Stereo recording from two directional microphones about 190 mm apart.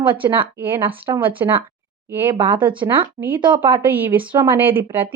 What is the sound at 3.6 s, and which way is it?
A woman's voice, 10° right (ahead or behind).